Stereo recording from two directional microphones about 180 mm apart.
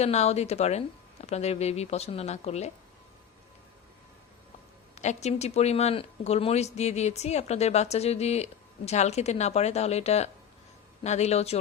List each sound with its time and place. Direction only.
0.0 s speech: 35° left (ahead or behind)
4.9 s speech: 40° left (ahead or behind)